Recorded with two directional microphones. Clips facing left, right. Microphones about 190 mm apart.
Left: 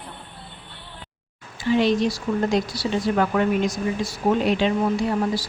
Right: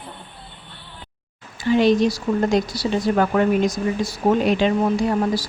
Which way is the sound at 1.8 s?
40° right (ahead or behind).